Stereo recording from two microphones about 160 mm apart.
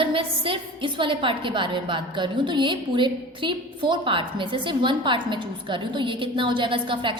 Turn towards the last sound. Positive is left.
turn(degrees=-30)  # may be behind; listen again after turning